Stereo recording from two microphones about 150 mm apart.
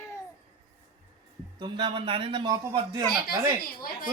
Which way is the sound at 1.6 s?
30° right (ahead or behind).